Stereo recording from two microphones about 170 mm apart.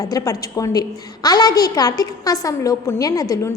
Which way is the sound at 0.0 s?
20° left (ahead or behind).